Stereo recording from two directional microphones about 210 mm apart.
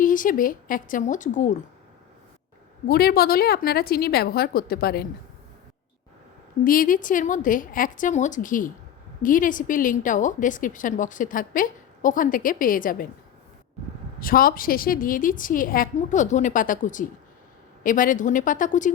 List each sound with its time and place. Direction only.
0.0 s a woman's voice: 40° left (ahead or behind)
2.8 s a woman's voice: 45° left (ahead or behind)
6.7 s a woman's voice: 40° left (ahead or behind)
14.2 s a woman's voice: 45° left (ahead or behind)